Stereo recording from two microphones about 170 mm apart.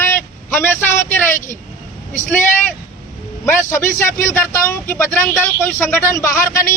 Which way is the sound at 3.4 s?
15° left (ahead or behind).